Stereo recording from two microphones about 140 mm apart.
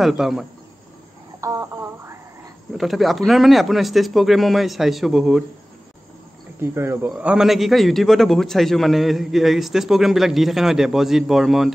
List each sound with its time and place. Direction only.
0.0 s a man's voice: centre (ahead or behind)
1.4 s speech: 25° right (ahead or behind)
2.8 s a man's voice: centre (ahead or behind)
6.6 s speech: 20° right (ahead or behind)
7.1 s a man's voice: 5° right (ahead or behind)